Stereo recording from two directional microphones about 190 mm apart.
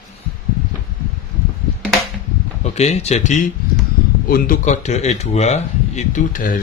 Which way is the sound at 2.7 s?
35° left (ahead or behind).